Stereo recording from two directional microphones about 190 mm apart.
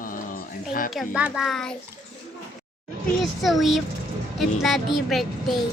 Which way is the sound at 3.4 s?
Centre (ahead or behind).